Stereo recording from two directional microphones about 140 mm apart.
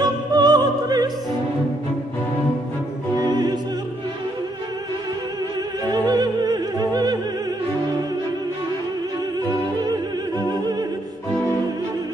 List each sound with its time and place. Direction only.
0.0 s opera: 30° right (ahead or behind)
6.0 s opera: 30° right (ahead or behind)
10.4 s opera: 30° right (ahead or behind)